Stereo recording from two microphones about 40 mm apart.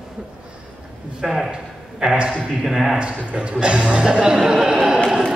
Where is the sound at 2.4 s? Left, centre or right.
Right.